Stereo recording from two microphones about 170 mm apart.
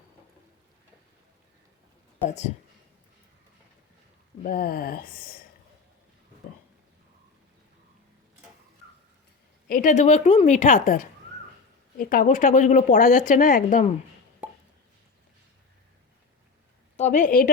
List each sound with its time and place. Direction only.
2.2 s speech: 40° left (ahead or behind)
4.4 s speech: 60° left (ahead or behind)
9.6 s a woman's voice: 50° left (ahead or behind)
14.4 s chopping: 5° right (ahead or behind)
17.0 s a woman's voice: 50° left (ahead or behind)